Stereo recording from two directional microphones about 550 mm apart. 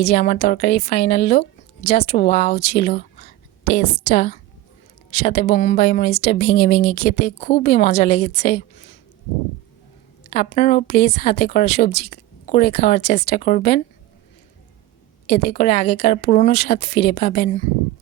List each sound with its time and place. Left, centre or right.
0.0 s speech: centre
10.2 s speech: centre
15.3 s speech: centre